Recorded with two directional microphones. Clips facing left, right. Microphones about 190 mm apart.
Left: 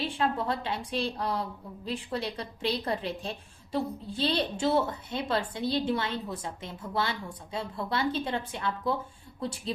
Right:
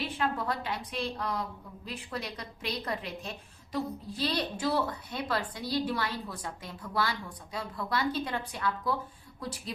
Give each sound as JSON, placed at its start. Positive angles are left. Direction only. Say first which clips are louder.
{"t": 0.0, "sound": "a woman's voice", "louder": "left 3 dB", "side_deg": 30}